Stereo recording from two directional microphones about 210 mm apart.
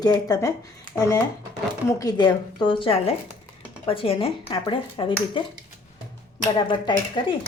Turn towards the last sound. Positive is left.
turn(degrees=20)  # may be behind; listen again after turning